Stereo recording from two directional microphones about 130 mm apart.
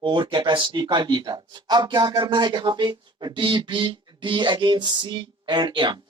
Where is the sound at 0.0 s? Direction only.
40° right (ahead or behind).